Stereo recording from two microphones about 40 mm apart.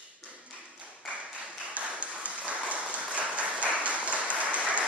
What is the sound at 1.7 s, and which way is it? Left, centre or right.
Applause, right.